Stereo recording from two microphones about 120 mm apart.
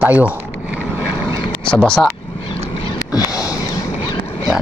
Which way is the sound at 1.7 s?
5° left (ahead or behind).